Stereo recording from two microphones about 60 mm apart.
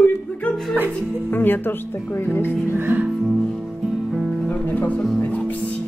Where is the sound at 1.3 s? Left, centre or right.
Left.